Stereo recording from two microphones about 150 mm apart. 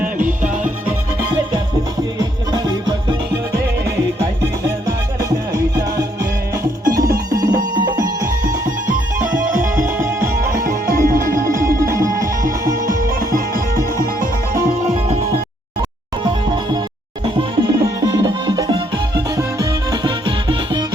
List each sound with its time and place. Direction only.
0.0 s music: 60° right (ahead or behind)
2.1 s music: 25° right (ahead or behind)
5.5 s music: 20° right (ahead or behind)
7.3 s music: 25° right (ahead or behind)
10.7 s music: 70° right (ahead or behind)
11.9 s music: 20° right (ahead or behind)
13.1 s music: 70° right (ahead or behind)
17.2 s music: 25° right (ahead or behind)